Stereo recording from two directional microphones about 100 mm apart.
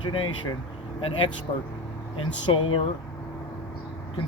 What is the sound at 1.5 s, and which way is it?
Speech, 90° left.